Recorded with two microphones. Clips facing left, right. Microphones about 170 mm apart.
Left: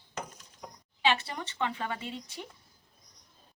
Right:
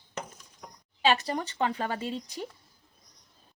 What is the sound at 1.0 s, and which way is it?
Speech, 40° right (ahead or behind).